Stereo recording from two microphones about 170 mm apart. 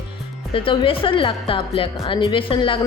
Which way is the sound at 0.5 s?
30° left (ahead or behind).